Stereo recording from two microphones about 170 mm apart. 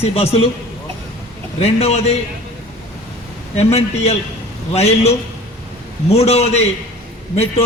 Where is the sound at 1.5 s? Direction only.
35° left (ahead or behind).